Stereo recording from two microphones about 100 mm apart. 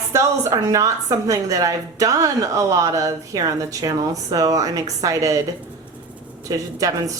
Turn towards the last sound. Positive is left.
turn(degrees=-35)  # may be behind; listen again after turning